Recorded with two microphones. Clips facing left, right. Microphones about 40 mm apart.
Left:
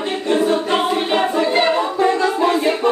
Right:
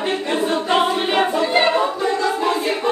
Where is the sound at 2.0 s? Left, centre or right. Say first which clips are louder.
Left 4 dB; left.